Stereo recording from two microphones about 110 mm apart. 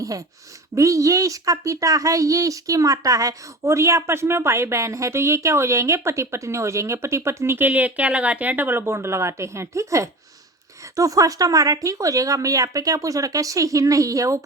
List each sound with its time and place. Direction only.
0.0 s speech: 30° right (ahead or behind)